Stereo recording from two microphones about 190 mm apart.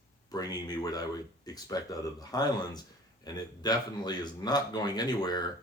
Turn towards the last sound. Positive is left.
turn(degrees=20)  # may be behind; listen again after turning